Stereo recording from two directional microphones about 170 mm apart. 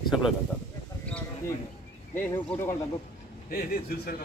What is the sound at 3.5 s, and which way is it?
Speech, 60° left (ahead or behind).